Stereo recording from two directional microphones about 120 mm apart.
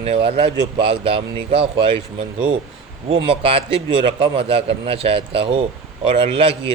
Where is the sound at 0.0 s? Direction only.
55° right (ahead or behind).